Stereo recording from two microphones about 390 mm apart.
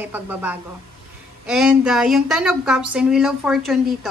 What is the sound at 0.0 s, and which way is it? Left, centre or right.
Speech, centre.